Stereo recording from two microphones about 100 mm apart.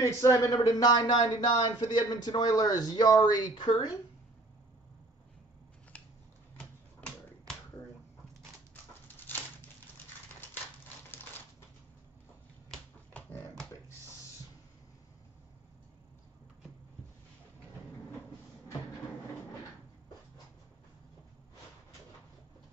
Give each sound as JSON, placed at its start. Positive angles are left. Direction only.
{"t": 0.0, "sound": "a woman's voice", "side_deg": 35}
{"t": 5.9, "sound": "scissors", "side_deg": 15}
{"t": 6.6, "sound": "typewriter", "side_deg": 10}